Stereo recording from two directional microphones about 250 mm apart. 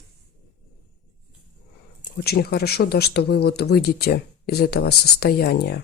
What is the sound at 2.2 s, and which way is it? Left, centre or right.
Speech, left.